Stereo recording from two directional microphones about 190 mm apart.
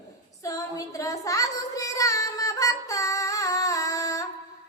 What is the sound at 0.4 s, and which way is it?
Child singing, 15° left (ahead or behind).